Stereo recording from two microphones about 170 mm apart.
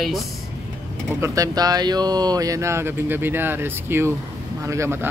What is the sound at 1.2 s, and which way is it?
Speech, 20° right (ahead or behind).